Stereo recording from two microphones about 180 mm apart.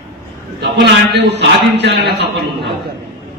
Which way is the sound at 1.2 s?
70° right (ahead or behind).